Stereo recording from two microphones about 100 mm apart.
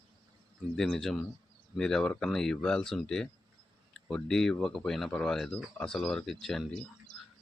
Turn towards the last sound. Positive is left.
turn(degrees=5)  # may be behind; listen again after turning